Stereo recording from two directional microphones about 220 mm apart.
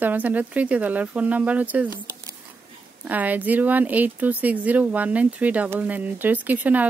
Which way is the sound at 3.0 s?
5° right (ahead or behind).